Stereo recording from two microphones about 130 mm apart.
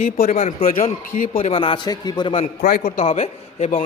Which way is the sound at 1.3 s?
45° left (ahead or behind).